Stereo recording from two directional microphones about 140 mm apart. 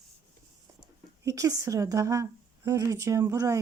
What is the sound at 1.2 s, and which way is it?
Speech, 25° right (ahead or behind).